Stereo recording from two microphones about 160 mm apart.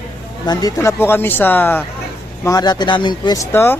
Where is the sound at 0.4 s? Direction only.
25° left (ahead or behind).